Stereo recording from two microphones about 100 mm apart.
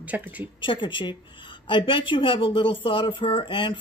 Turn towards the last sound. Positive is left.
turn(degrees=55)  # may be behind; listen again after turning